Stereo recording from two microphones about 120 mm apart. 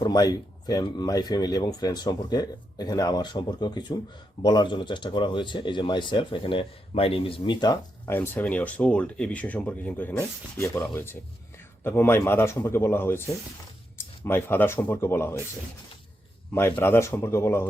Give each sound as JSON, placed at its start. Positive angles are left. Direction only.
{"t": 0.0, "sound": "speech", "side_deg": 35}
{"t": 8.0, "sound": "speech", "side_deg": 20}
{"t": 16.6, "sound": "speech", "side_deg": 20}